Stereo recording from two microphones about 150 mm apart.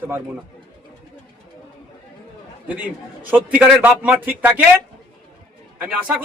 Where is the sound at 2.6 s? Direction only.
10° right (ahead or behind).